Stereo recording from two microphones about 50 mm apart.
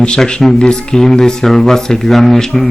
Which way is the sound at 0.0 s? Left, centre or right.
Centre.